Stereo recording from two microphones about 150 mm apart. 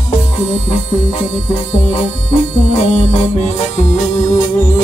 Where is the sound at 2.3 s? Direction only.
50° left (ahead or behind).